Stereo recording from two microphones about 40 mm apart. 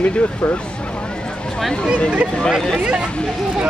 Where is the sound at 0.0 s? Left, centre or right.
Left.